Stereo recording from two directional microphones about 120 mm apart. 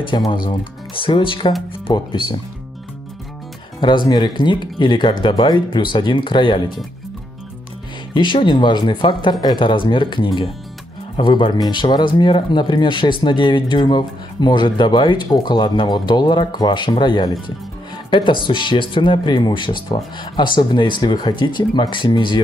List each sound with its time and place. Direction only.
0.3 s speech: 45° left (ahead or behind)
3.8 s speech: 40° left (ahead or behind)
8.1 s speech: 45° left (ahead or behind)